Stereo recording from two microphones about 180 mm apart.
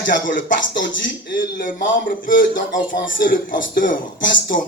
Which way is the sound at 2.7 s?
50° left (ahead or behind).